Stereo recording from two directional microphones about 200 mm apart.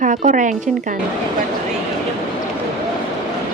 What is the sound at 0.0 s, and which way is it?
Speech, 40° right (ahead or behind).